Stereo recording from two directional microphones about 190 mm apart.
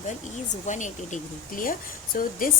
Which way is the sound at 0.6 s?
40° left (ahead or behind).